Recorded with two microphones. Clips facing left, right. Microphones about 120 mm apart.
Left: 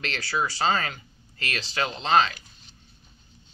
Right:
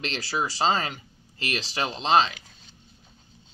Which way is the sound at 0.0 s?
20° right (ahead or behind).